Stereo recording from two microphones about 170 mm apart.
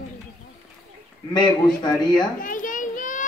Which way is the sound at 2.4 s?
50° left (ahead or behind).